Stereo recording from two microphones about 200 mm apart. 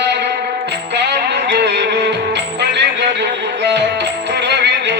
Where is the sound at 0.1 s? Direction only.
60° right (ahead or behind).